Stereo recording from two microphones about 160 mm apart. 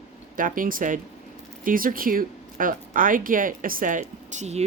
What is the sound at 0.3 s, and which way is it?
Speech, 60° right (ahead or behind).